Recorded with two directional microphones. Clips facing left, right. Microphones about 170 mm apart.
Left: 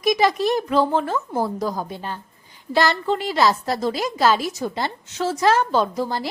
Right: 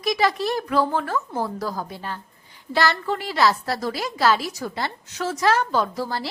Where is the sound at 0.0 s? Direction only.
20° left (ahead or behind).